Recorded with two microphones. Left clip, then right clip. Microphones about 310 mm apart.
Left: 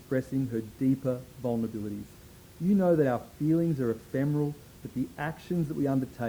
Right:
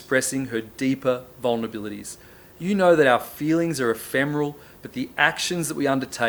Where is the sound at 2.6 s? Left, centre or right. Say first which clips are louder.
Right 9 dB; centre.